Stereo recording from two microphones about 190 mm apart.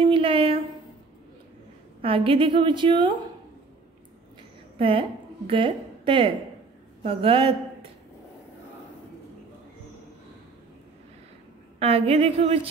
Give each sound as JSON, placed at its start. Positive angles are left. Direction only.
{"t": 0.0, "sound": "a sound", "side_deg": -25}
{"t": 2.0, "sound": "a woman's voice", "side_deg": -30}
{"t": 4.7, "sound": "a woman's voice", "side_deg": -30}
{"t": 11.8, "sound": "a woman's voice", "side_deg": -30}